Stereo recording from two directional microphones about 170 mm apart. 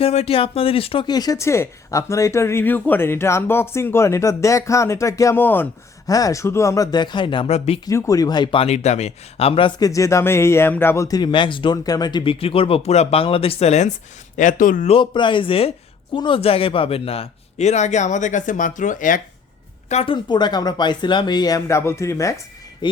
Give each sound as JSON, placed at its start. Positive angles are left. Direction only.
{"t": 0.0, "sound": "speech", "side_deg": 35}
{"t": 7.9, "sound": "speech", "side_deg": 20}
{"t": 14.8, "sound": "speech", "side_deg": 30}
{"t": 19.9, "sound": "speech", "side_deg": 35}